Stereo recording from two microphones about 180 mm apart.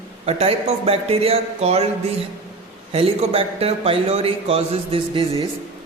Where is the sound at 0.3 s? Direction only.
35° right (ahead or behind).